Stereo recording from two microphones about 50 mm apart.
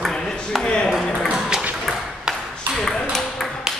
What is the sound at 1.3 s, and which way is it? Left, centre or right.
Ping, centre.